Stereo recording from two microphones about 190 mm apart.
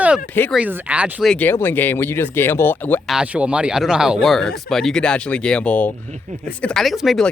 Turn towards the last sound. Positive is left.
turn(degrees=0)  # may be behind; listen again after turning